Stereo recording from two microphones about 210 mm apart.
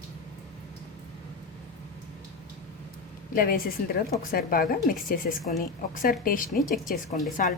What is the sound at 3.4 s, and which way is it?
A woman's voice, 45° left (ahead or behind).